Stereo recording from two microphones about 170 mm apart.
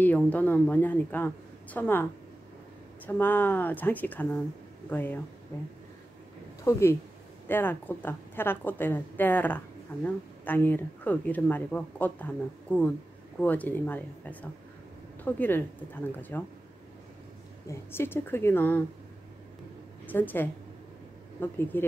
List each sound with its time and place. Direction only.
0.0 s speech: 10° left (ahead or behind)
3.1 s speech: 10° left (ahead or behind)
6.6 s speech: 15° left (ahead or behind)
17.6 s speech: 15° left (ahead or behind)
20.1 s speech: 10° left (ahead or behind)